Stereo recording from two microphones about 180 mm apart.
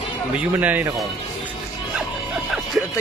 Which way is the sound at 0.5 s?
10° right (ahead or behind).